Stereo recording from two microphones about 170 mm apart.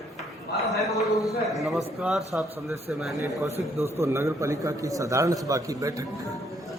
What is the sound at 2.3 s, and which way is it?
Speech, 10° right (ahead or behind).